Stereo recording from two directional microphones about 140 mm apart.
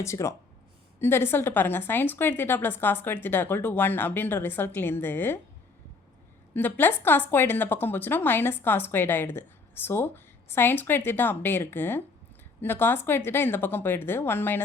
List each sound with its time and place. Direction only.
0.0 s a woman's voice: 20° left (ahead or behind)
6.5 s a woman's voice: 15° left (ahead or behind)